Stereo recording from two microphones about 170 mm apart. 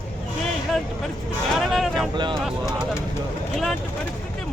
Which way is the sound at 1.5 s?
Centre (ahead or behind).